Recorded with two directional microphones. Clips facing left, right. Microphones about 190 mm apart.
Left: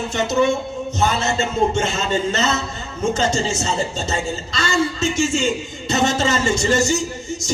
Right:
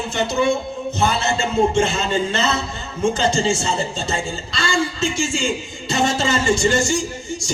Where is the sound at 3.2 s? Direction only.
30° right (ahead or behind).